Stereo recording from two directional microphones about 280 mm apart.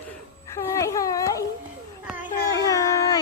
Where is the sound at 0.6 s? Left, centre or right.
Centre.